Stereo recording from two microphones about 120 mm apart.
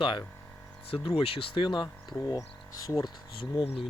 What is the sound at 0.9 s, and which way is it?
Speech, 50° left (ahead or behind).